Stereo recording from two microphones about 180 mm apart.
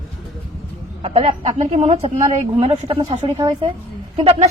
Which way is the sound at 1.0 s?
35° right (ahead or behind).